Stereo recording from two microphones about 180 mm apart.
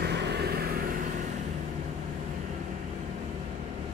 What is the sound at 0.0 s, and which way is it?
Vehicle, 65° right (ahead or behind).